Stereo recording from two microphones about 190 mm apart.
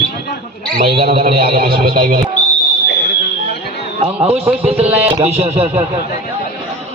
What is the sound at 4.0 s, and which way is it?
A man's voice, 30° right (ahead or behind).